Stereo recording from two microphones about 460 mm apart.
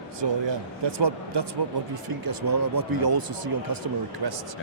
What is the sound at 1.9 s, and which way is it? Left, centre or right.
Speech, right.